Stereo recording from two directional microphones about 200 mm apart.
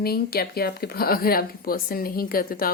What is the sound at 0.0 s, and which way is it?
Speech, 50° left (ahead or behind).